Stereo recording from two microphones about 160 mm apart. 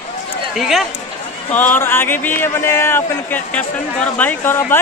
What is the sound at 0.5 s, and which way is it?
Speech, centre (ahead or behind).